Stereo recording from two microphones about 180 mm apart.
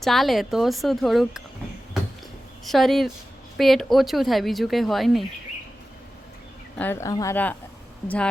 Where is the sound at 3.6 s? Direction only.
Centre (ahead or behind).